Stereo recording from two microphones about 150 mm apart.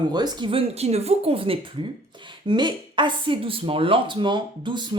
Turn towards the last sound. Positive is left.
turn(degrees=-30)  # may be behind; listen again after turning